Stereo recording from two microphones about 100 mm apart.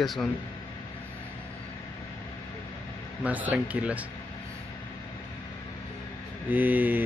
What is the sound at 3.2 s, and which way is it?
Speech, 15° right (ahead or behind).